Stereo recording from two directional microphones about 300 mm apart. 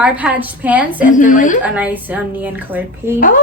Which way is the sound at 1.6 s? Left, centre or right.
Centre.